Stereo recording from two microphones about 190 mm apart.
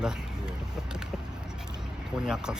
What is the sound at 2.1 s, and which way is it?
Speech, 5° right (ahead or behind).